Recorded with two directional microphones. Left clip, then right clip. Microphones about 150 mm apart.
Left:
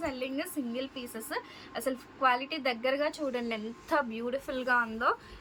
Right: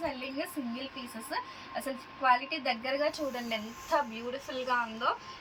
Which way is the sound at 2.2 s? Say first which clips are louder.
Right 1 dB; 20° left (ahead or behind).